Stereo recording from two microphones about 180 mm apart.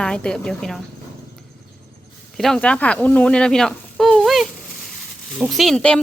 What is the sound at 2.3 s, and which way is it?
Speech, centre (ahead or behind).